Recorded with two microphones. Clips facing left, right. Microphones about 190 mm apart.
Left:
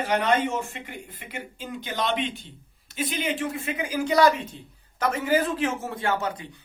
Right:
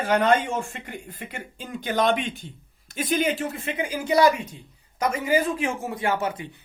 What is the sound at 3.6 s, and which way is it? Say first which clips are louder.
Speech: left 1 dB; 25° right (ahead or behind).